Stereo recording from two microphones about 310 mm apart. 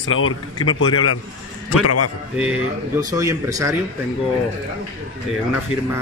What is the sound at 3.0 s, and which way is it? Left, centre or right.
Speech, centre.